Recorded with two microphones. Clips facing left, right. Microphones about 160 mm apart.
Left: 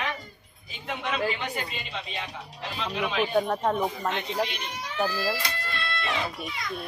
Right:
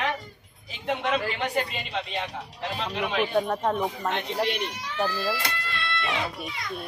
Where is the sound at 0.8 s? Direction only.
65° right (ahead or behind).